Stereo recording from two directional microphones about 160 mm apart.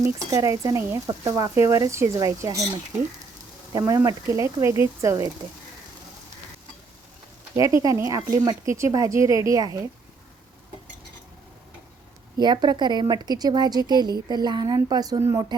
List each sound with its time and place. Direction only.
0.0 s speech: 20° right (ahead or behind)
7.5 s speech: 20° right (ahead or behind)
12.4 s speech: 25° right (ahead or behind)